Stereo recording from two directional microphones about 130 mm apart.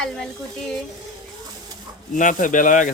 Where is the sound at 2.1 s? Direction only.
85° left.